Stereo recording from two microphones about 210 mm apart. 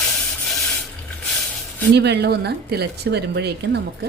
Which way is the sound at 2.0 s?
50° right (ahead or behind).